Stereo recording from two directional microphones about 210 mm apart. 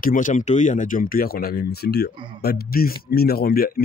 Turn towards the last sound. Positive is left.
turn(degrees=45)  # may be behind; listen again after turning